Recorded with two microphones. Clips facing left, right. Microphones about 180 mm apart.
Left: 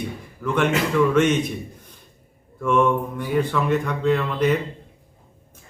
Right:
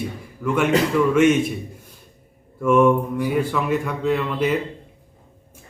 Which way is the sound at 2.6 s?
5° right (ahead or behind).